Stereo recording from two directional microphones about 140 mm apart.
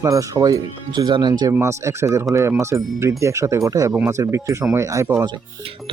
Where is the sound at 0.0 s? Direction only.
25° right (ahead or behind).